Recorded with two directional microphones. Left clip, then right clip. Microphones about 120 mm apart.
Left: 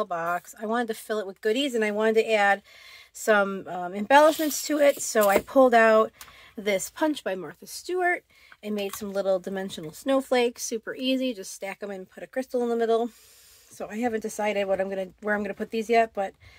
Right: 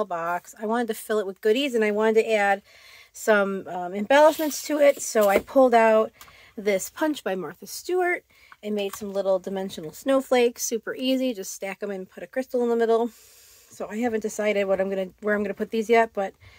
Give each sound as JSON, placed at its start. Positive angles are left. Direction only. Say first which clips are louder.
{"t": 0.0, "sound": "speech", "louder": "right 1 dB", "side_deg": -20}
{"t": 0.9, "sound": "speech", "louder": "right 4 dB", "side_deg": -40}
{"t": 6.5, "sound": "speech", "louder": "right 2 dB", "side_deg": -20}
{"t": 7.0, "sound": "speech", "louder": "right 1 dB", "side_deg": -35}
{"t": 8.6, "sound": "speech", "louder": "right 3 dB", "side_deg": -15}
{"t": 10.0, "sound": "speech", "louder": "right 3 dB", "side_deg": -30}